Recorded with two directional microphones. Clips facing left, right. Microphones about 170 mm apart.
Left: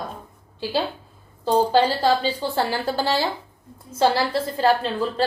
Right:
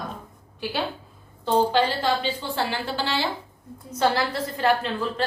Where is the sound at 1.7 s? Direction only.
35° left (ahead or behind).